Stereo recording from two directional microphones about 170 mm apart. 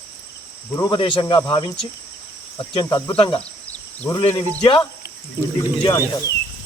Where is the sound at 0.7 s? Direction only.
25° left (ahead or behind).